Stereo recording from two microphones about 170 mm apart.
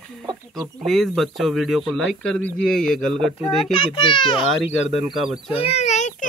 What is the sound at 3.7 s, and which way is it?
Speech, 30° left (ahead or behind).